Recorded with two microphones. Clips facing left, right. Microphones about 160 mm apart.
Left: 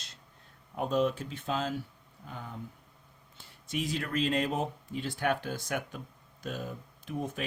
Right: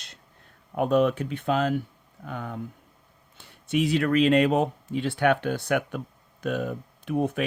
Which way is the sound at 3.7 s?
70° right (ahead or behind).